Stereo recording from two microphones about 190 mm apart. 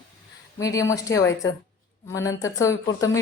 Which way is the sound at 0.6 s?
15° left (ahead or behind).